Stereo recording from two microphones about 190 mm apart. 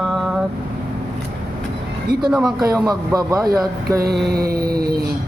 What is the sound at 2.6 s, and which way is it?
Speech, 20° right (ahead or behind).